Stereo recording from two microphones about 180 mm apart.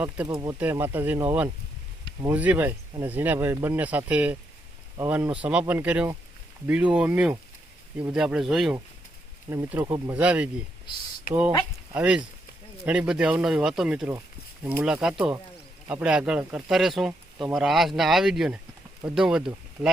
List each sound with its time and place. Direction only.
0.0 s speech: 15° right (ahead or behind)
9.5 s speech: 15° right (ahead or behind)
10.9 s speech: 25° left (ahead or behind)
11.3 s speech: 50° left (ahead or behind)
11.9 s speech: 5° right (ahead or behind)